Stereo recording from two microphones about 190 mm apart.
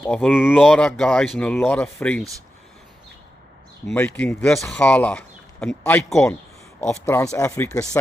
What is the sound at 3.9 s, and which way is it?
Speech, 5° left (ahead or behind).